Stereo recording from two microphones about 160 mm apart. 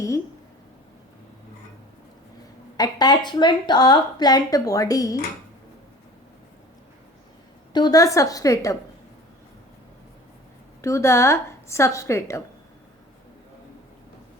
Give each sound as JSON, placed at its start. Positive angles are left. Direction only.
{"t": 2.7, "sound": "a woman's voice", "side_deg": 25}
{"t": 7.7, "sound": "a woman's voice", "side_deg": 25}
{"t": 10.8, "sound": "a woman's voice", "side_deg": 20}